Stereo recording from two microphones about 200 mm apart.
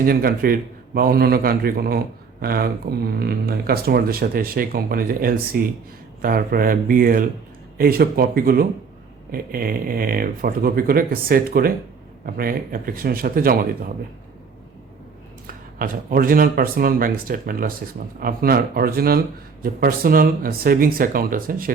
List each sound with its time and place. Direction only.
0.0 s speech: 45° right (ahead or behind)
15.4 s speech: 45° right (ahead or behind)